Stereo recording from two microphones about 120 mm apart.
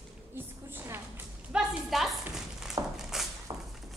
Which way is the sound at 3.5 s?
40° right (ahead or behind).